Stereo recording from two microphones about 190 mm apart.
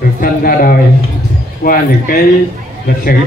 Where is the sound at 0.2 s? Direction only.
50° left (ahead or behind).